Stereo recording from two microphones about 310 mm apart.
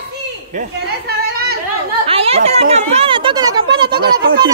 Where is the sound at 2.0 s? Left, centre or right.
Centre.